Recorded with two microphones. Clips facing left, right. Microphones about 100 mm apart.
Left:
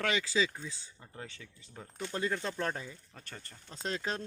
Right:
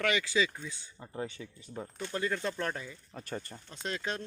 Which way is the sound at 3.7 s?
30° left (ahead or behind).